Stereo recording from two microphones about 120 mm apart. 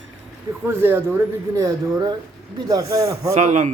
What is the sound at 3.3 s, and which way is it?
Speech, 80° right.